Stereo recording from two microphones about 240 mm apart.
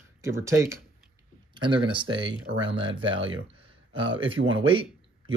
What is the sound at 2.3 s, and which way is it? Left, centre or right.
Speech, right.